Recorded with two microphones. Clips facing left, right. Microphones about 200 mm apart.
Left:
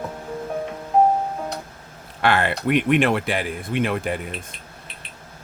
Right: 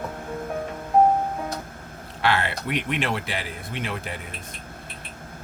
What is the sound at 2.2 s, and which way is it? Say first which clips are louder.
Speech: left 4 dB; 50° left (ahead or behind).